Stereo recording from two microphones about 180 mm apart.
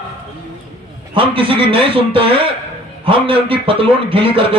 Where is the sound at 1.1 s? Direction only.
30° right (ahead or behind).